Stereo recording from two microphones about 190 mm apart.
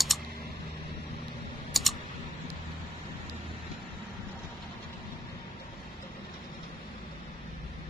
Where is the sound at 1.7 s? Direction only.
Centre (ahead or behind).